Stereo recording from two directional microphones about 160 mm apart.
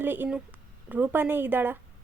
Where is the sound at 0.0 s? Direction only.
15° right (ahead or behind).